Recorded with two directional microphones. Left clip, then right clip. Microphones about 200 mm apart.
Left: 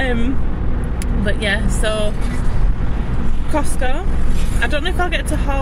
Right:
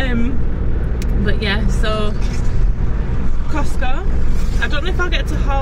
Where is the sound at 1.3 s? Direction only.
20° left (ahead or behind).